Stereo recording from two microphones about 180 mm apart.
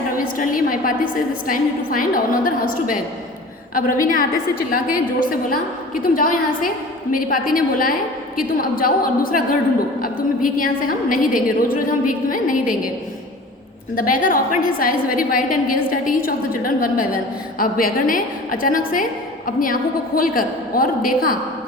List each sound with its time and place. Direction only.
0.3 s a woman's voice: 50° left (ahead or behind)
13.9 s a woman's voice: 50° left (ahead or behind)